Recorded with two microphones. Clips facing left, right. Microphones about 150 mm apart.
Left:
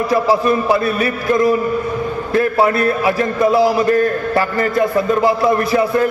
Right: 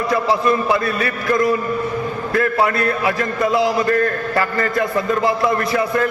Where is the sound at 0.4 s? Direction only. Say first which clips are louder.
Left 2 dB; 25° left (ahead or behind).